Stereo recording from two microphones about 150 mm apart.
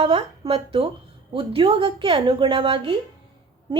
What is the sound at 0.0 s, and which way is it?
A woman's voice, 40° right (ahead or behind).